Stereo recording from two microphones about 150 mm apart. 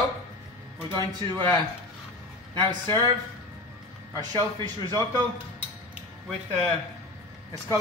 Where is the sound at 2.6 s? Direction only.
30° right (ahead or behind).